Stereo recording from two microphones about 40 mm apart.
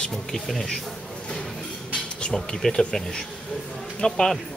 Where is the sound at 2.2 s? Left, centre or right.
Centre.